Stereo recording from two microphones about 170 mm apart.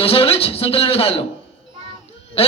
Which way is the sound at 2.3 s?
35° left (ahead or behind).